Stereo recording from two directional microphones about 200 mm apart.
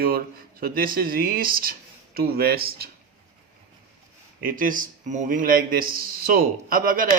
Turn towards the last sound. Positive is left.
turn(degrees=-45)  # may be behind; listen again after turning